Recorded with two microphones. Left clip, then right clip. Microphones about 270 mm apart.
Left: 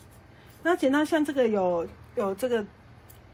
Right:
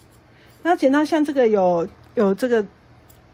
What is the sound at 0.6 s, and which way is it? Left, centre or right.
Speech, right.